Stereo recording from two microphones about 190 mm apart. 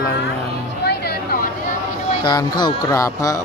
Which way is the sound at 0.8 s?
55° left (ahead or behind).